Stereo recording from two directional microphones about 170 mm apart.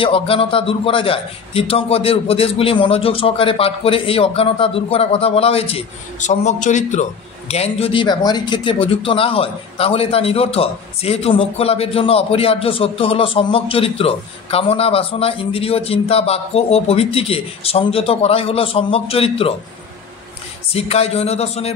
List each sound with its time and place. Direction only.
0.0 s a man's voice: 35° left (ahead or behind)
20.7 s a man's voice: 35° left (ahead or behind)